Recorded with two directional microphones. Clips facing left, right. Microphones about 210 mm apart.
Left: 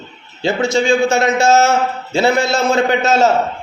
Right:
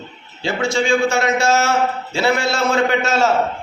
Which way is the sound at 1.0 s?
20° left (ahead or behind).